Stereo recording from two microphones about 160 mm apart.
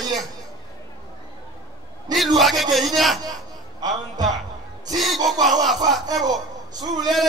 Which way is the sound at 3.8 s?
25° right (ahead or behind).